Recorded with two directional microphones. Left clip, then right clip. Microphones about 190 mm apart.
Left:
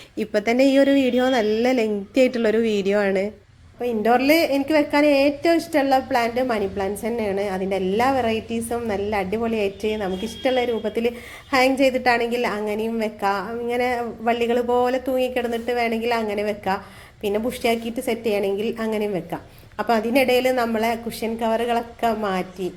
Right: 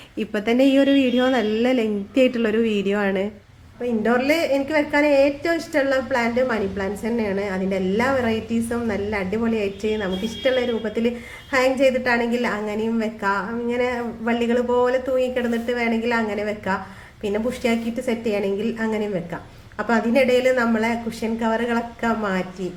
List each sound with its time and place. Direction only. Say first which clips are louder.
0.2 s a woman's voice: left 1 dB; 25° left (ahead or behind)